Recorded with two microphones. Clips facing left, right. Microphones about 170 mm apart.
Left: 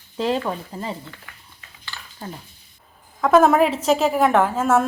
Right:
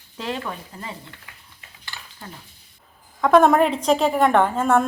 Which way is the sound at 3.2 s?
Centre (ahead or behind).